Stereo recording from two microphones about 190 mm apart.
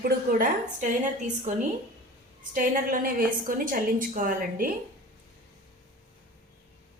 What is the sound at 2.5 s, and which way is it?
A woman's voice, 45° right (ahead or behind).